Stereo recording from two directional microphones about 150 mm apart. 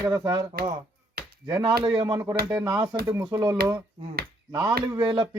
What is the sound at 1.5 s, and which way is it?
A man's voice, 25° right (ahead or behind).